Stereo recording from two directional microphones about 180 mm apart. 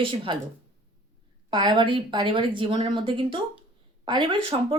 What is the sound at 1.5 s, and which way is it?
A woman's voice, 25° right (ahead or behind).